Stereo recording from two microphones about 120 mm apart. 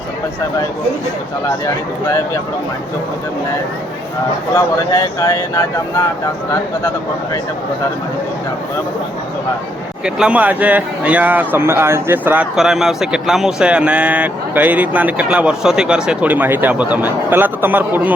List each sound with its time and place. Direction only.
4.5 s speech: 30° left (ahead or behind)
10.2 s speech: 10° right (ahead or behind)
12.5 s speech: 5° right (ahead or behind)